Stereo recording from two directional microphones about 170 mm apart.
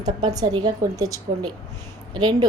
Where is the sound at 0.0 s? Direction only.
25° right (ahead or behind).